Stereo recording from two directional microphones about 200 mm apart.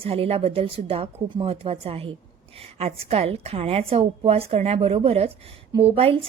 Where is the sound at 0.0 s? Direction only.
30° right (ahead or behind).